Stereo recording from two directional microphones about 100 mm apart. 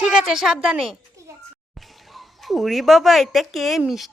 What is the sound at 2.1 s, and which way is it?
Speech, centre (ahead or behind).